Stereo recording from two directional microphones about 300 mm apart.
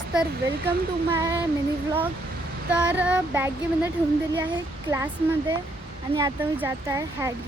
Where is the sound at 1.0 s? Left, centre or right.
Centre.